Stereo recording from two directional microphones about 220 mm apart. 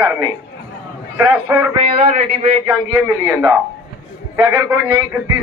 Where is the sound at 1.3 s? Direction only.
10° right (ahead or behind).